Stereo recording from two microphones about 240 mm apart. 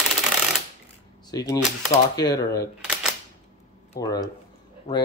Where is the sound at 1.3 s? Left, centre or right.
Centre.